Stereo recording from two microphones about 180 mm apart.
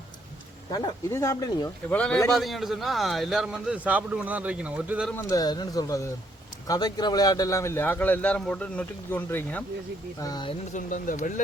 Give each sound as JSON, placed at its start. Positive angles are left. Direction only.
{"t": 0.7, "sound": "speech", "side_deg": 20}
{"t": 1.9, "sound": "a man's voice", "side_deg": 5}
{"t": 5.1, "sound": "speech", "side_deg": 20}
{"t": 10.2, "sound": "speech", "side_deg": 20}
{"t": 10.7, "sound": "speech", "side_deg": 45}